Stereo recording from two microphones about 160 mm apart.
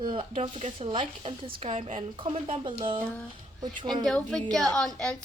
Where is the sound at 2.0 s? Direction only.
35° right (ahead or behind).